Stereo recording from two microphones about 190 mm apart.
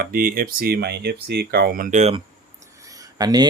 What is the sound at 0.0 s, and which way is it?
Speech, 50° right (ahead or behind).